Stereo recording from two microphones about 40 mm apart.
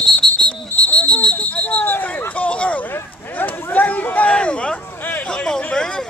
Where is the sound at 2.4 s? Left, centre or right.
Left.